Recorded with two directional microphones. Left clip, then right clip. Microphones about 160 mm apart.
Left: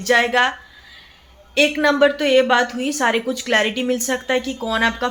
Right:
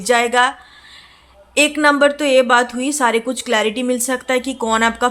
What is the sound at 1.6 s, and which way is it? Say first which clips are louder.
A woman's voice: right 2 dB; 30° right (ahead or behind).